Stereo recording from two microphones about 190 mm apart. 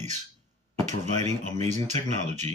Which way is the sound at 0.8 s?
35° right (ahead or behind).